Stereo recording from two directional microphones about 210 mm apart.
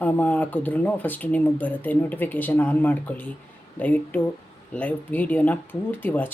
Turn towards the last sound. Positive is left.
turn(degrees=10)  # may be behind; listen again after turning